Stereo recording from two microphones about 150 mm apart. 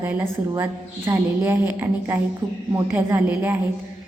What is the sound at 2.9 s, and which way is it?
Speech, 15° right (ahead or behind).